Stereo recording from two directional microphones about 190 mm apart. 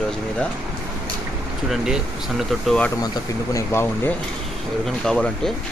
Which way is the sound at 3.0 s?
20° left (ahead or behind).